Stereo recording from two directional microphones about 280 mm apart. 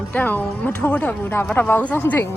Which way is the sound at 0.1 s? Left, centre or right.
Centre.